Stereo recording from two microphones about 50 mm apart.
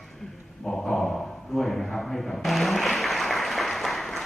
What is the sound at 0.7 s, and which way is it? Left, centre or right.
Dog, centre.